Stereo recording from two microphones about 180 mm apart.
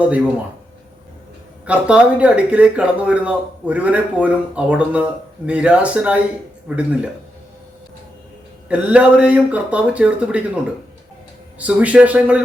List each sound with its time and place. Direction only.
1.6 s speech: 5° right (ahead or behind)
8.7 s speech: 5° right (ahead or behind)
11.6 s speech: 10° right (ahead or behind)